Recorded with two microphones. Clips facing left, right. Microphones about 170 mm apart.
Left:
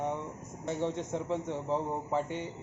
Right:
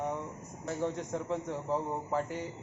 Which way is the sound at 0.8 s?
25° left (ahead or behind).